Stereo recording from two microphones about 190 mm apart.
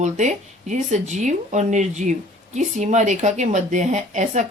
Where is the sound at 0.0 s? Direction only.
40° right (ahead or behind).